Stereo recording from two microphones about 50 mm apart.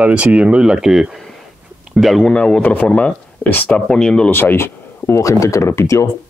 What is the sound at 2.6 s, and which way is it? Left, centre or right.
Speech, left.